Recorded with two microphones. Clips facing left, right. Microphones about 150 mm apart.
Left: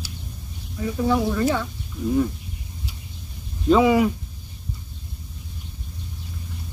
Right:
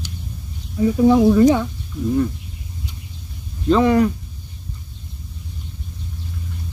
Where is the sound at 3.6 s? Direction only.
5° left (ahead or behind).